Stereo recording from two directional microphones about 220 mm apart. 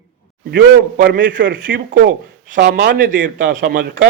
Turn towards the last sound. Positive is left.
turn(degrees=-45)  # may be behind; listen again after turning